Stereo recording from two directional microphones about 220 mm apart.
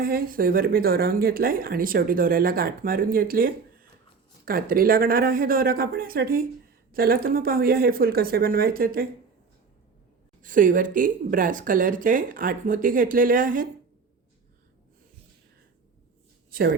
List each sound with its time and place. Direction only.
0.0 s speech: 40° right (ahead or behind)
10.4 s speech: 35° right (ahead or behind)
16.5 s speech: 40° right (ahead or behind)